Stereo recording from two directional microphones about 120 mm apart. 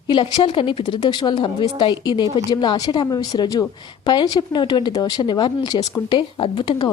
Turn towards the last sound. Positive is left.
turn(degrees=45)  # may be behind; listen again after turning